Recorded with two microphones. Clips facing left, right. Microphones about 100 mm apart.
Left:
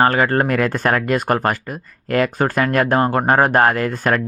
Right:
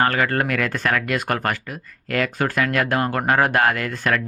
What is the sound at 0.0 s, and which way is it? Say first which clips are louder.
Speech: left 4 dB; 35° left (ahead or behind).